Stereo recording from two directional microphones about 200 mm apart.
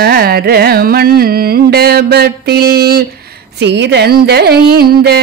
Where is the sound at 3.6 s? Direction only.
60° right (ahead or behind).